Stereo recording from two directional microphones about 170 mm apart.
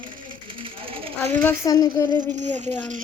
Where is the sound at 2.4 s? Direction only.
45° right (ahead or behind).